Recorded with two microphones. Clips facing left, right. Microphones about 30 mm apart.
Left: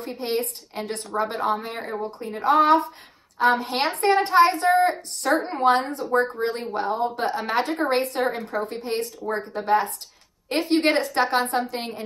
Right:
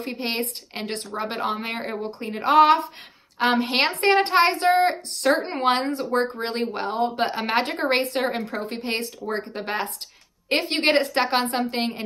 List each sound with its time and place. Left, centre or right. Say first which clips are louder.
0.0 s a woman's voice: left 1 dB; right